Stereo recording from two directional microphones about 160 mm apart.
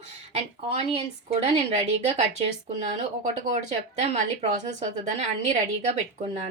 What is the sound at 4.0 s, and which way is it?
A woman's voice, 45° right (ahead or behind).